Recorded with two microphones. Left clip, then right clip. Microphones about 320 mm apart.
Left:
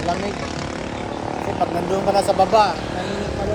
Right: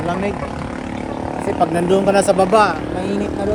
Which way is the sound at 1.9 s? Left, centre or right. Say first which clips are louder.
Right 4 dB; right.